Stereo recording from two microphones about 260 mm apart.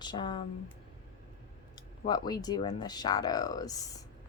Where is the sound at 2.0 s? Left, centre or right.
Centre.